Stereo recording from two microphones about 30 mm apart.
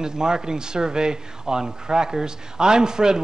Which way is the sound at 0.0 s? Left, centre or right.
Right.